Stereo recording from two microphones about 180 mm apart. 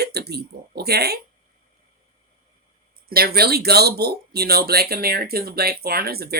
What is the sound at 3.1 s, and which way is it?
Speech, 60° right (ahead or behind).